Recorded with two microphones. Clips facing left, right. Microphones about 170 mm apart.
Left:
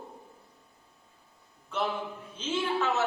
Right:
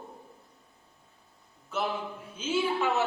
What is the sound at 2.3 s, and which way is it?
Speech, 10° right (ahead or behind).